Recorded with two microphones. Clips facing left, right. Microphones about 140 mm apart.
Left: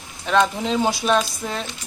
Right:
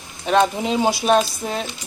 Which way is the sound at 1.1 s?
40° right (ahead or behind).